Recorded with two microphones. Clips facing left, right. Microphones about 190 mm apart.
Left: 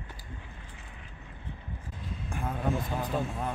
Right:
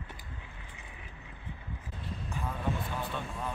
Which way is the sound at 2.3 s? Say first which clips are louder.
Left 3 dB; 50° left (ahead or behind).